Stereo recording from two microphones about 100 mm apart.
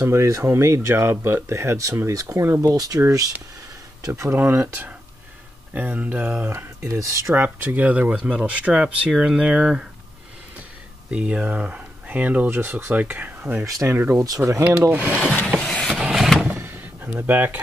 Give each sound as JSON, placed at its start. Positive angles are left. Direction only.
{"t": 0.0, "sound": "speech", "side_deg": -30}
{"t": 4.1, "sound": "speech", "side_deg": -25}
{"t": 6.5, "sound": "speech", "side_deg": -30}
{"t": 7.4, "sound": "speech", "side_deg": -15}
{"t": 11.1, "sound": "speech", "side_deg": -10}
{"t": 13.7, "sound": "speech", "side_deg": -35}
{"t": 13.9, "sound": "speech", "side_deg": -25}
{"t": 14.2, "sound": "speech", "side_deg": -35}
{"t": 14.9, "sound": "speech", "side_deg": -15}
{"t": 15.2, "sound": "vehicle", "side_deg": 10}
{"t": 15.9, "sound": "vehicle", "side_deg": -5}
{"t": 16.4, "sound": "door", "side_deg": -20}